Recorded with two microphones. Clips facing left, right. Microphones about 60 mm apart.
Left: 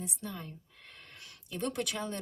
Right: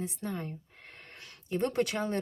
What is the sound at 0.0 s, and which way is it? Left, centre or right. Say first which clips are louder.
Speech: right 5 dB; right.